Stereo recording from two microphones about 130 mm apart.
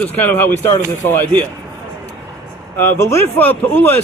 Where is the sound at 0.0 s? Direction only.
15° left (ahead or behind).